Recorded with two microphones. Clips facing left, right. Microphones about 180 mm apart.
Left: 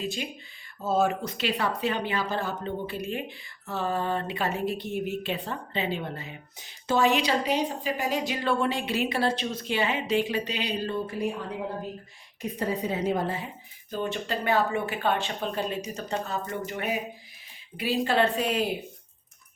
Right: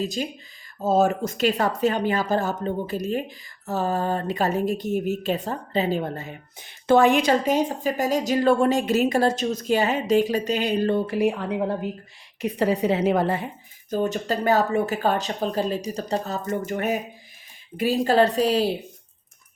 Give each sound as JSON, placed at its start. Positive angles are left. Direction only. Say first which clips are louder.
{"t": 0.0, "sound": "a woman's voice", "louder": "right 5 dB", "side_deg": -40}
{"t": 13.9, "sound": "speech", "louder": "right 6 dB", "side_deg": -40}